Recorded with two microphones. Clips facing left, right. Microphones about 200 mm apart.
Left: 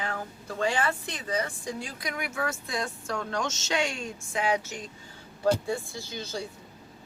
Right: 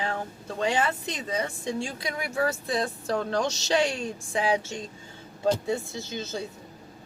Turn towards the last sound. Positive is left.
turn(degrees=-20)  # may be behind; listen again after turning